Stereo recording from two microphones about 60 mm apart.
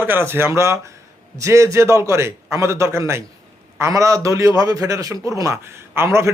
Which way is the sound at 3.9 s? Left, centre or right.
Right.